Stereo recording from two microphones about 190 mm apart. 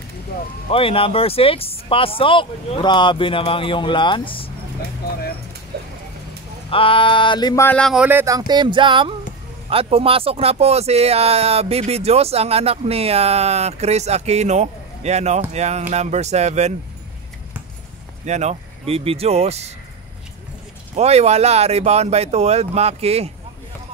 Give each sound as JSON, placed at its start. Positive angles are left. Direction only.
{"t": 0.7, "sound": "speech", "side_deg": 30}
{"t": 6.7, "sound": "speech", "side_deg": 30}
{"t": 18.2, "sound": "speech", "side_deg": -35}
{"t": 20.9, "sound": "speech", "side_deg": -35}